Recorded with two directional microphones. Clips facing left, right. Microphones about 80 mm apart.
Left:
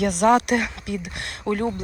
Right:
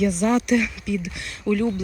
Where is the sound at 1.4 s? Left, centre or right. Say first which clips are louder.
Right 2 dB; left.